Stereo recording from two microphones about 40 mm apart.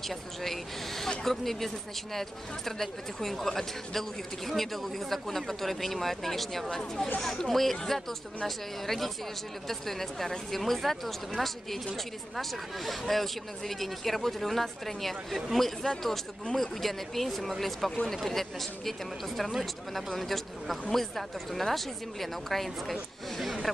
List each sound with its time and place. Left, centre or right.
0.1 s speech: centre
6.7 s speech: centre